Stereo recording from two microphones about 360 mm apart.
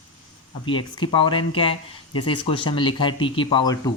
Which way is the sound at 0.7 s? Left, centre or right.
Centre.